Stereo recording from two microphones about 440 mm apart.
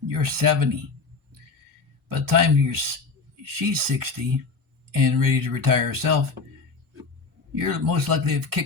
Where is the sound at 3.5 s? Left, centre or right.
Right.